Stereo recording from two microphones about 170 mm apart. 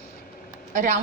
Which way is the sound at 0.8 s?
45° right (ahead or behind).